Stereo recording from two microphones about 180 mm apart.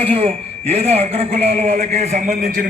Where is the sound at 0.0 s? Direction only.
30° right (ahead or behind).